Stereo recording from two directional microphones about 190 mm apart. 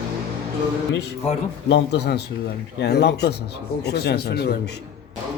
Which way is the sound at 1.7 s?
65° left (ahead or behind).